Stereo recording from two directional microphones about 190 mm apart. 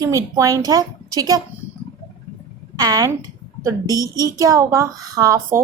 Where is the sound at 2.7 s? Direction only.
20° right (ahead or behind).